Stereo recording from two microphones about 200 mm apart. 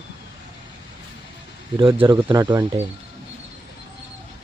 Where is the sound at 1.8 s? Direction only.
25° right (ahead or behind).